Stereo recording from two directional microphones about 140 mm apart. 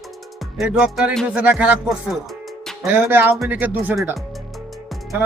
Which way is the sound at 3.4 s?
15° right (ahead or behind).